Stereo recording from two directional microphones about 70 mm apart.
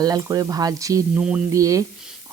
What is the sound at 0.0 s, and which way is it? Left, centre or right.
Speech, right.